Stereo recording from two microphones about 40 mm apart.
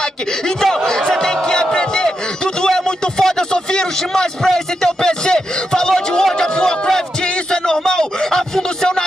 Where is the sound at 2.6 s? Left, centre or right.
Centre.